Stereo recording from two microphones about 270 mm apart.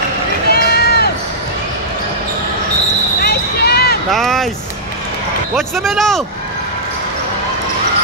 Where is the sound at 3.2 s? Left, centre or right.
Left.